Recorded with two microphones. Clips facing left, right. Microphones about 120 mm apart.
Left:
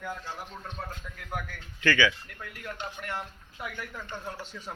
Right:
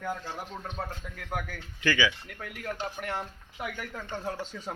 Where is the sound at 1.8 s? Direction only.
15° right (ahead or behind).